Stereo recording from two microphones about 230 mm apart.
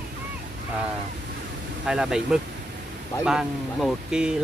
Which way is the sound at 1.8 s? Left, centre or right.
Centre.